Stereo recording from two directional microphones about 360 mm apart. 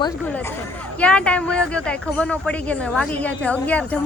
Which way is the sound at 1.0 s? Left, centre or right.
Centre.